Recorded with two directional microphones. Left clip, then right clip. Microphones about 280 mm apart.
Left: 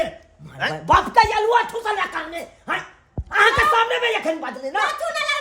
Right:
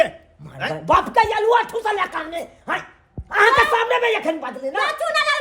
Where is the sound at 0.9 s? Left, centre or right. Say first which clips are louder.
Left 1 dB; centre.